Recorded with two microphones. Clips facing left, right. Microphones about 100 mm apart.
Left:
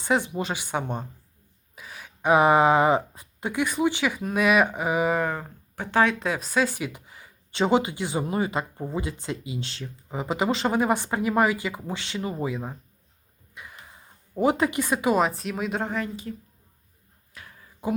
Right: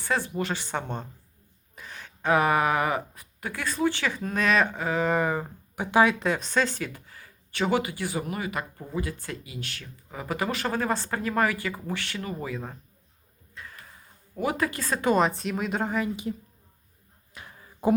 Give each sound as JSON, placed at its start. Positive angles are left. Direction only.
{"t": 0.0, "sound": "speech", "side_deg": 20}
{"t": 1.7, "sound": "a sound", "side_deg": 5}
{"t": 2.3, "sound": "speech", "side_deg": 20}
{"t": 5.1, "sound": "speech", "side_deg": -5}
{"t": 16.3, "sound": "speech", "side_deg": -20}
{"t": 17.3, "sound": "a sound", "side_deg": -25}